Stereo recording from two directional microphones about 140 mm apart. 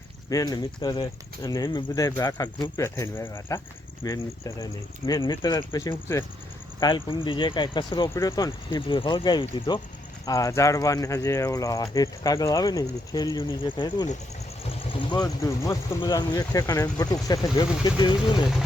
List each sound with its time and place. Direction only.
0.3 s speech: 25° left (ahead or behind)
6.7 s speech: 30° left (ahead or behind)